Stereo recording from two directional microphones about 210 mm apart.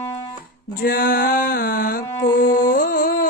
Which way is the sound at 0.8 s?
45° left (ahead or behind).